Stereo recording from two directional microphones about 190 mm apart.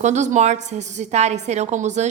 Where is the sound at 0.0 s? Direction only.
40° right (ahead or behind).